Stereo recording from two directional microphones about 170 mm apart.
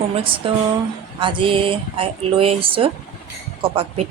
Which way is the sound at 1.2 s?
30° right (ahead or behind).